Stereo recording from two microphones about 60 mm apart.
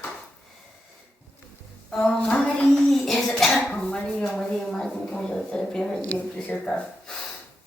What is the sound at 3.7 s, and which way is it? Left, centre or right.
Dishes, centre.